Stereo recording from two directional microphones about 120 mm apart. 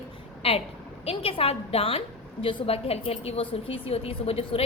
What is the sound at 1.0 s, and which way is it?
A woman's voice, 55° left (ahead or behind).